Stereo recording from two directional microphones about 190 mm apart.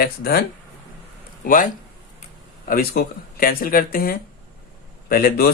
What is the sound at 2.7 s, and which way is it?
Speech, 50° left (ahead or behind).